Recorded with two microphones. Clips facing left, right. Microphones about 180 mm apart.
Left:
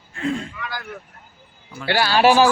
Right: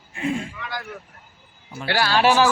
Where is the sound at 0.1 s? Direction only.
15° right (ahead or behind).